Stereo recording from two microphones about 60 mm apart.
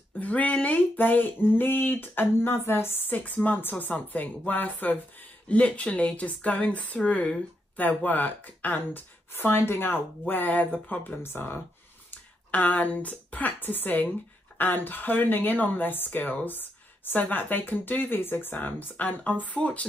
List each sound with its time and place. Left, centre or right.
0.2 s a woman's voice: left
8.0 s a woman's voice: left
11.2 s a woman's voice: left
12.1 s a woman's voice: left